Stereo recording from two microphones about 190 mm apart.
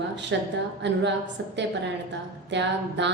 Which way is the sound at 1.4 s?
75° right (ahead or behind).